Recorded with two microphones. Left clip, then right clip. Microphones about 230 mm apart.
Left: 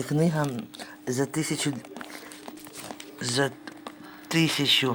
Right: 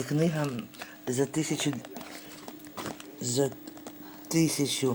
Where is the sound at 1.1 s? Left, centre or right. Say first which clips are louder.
Even; left.